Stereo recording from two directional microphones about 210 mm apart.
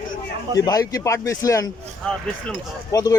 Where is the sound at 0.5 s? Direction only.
15° left (ahead or behind).